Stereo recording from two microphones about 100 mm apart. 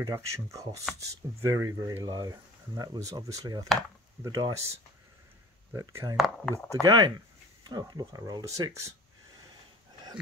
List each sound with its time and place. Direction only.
0.0 s speech: 30° right (ahead or behind)
5.8 s speech: 35° right (ahead or behind)
6.1 s speech: centre (ahead or behind)
6.7 s speech: 40° right (ahead or behind)